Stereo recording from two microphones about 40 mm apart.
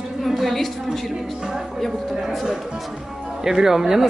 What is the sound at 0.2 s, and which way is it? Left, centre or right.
Speech, centre.